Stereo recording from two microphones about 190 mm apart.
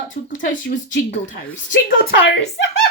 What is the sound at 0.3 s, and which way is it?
Speech, 80° left.